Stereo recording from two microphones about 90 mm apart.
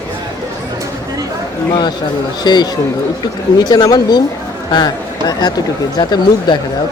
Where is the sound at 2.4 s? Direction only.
55° left (ahead or behind).